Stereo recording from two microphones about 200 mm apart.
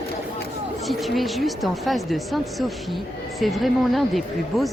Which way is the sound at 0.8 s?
Centre (ahead or behind).